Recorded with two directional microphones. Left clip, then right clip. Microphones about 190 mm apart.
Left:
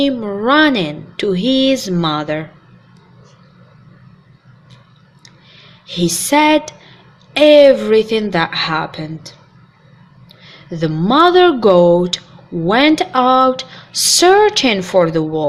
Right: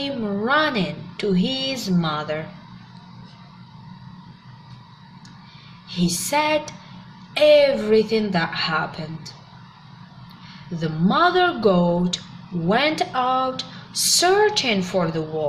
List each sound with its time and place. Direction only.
0.0 s speech: 55° left (ahead or behind)
5.9 s speech: 55° left (ahead or behind)
10.8 s speech: 50° left (ahead or behind)